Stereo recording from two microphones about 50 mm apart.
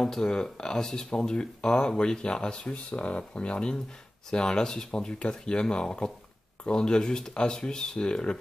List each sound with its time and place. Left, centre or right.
0.0 s speech: centre